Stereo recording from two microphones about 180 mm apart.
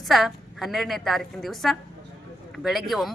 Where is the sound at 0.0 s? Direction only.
Centre (ahead or behind).